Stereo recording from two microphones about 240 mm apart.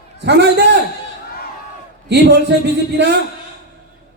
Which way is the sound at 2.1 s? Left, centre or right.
Right.